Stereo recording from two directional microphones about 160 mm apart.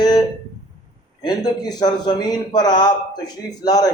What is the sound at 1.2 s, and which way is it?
A man's voice, 25° left (ahead or behind).